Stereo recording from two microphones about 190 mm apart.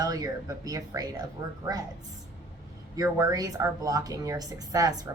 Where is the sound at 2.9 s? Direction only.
20° right (ahead or behind).